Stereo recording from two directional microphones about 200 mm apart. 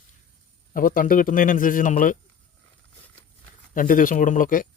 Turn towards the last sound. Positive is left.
turn(degrees=45)  # may be behind; listen again after turning